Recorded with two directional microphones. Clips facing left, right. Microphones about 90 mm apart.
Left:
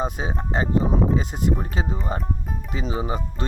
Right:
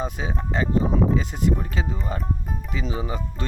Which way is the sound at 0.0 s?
30° left (ahead or behind).